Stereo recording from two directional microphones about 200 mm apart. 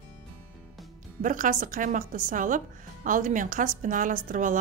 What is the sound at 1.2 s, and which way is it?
A woman's voice, 40° right (ahead or behind).